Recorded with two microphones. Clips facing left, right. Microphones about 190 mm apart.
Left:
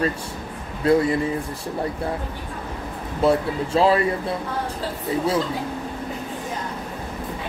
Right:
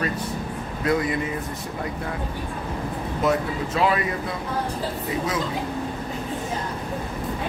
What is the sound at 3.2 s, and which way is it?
Speech, 30° left (ahead or behind).